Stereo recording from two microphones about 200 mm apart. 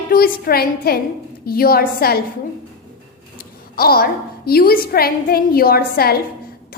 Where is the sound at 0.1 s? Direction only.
50° left (ahead or behind).